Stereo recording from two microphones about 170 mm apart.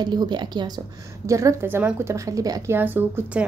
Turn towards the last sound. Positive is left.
turn(degrees=-10)  # may be behind; listen again after turning